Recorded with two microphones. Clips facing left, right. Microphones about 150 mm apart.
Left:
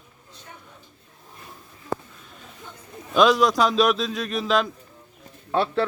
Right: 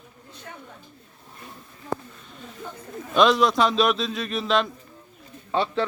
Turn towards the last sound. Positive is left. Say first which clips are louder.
# left 2 dB
turn(degrees=5)  # may be behind; listen again after turning